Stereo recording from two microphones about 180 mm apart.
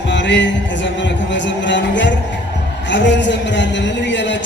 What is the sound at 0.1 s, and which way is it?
Music, 85° left.